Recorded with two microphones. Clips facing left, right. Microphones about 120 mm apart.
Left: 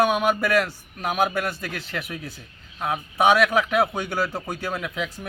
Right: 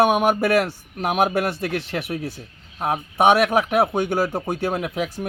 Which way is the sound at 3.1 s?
55° right (ahead or behind).